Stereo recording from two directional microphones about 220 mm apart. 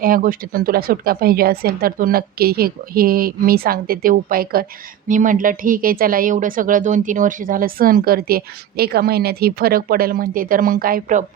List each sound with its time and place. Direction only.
0.0 s speech: 40° right (ahead or behind)